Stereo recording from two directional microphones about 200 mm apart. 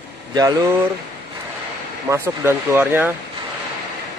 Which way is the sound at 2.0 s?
10° right (ahead or behind).